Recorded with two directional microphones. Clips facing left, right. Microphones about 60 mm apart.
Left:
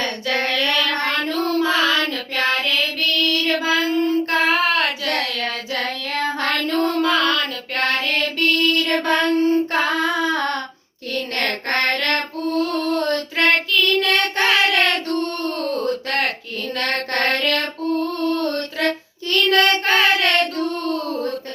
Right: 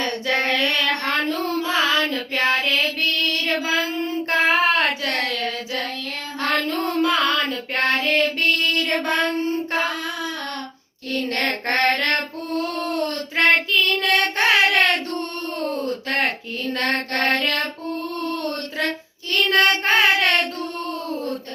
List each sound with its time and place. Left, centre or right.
0.0 s child singing: right
5.7 s child singing: left
6.7 s music: right
9.7 s child singing: left
11.1 s child singing: right
12.9 s child singing: left
13.3 s child singing: right
16.0 s a sound: right
16.7 s mantra: right
17.2 s music: right
18.2 s a sound: right
19.3 s child singing: right